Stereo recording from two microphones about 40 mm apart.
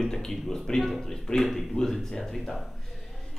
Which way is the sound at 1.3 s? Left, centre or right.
Left.